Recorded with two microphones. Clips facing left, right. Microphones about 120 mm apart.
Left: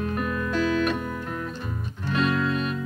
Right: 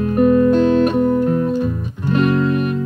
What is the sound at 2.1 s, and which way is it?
Music, 50° right (ahead or behind).